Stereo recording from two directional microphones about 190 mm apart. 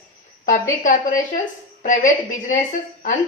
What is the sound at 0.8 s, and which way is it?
A woman's voice, 45° left (ahead or behind).